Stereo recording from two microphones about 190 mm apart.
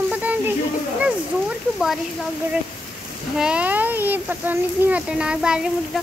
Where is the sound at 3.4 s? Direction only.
5° right (ahead or behind).